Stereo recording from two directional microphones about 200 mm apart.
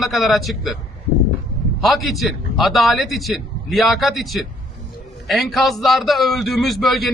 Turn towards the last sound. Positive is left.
turn(degrees=0)  # may be behind; listen again after turning